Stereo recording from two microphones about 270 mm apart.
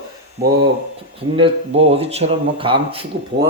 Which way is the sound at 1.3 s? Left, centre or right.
Right.